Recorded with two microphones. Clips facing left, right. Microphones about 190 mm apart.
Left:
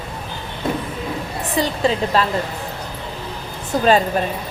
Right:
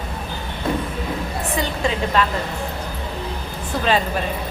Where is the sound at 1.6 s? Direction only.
35° left (ahead or behind).